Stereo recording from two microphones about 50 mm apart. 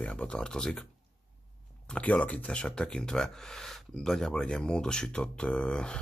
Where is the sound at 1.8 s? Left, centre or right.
Left.